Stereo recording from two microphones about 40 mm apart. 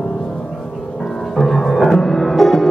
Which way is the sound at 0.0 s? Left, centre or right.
Left.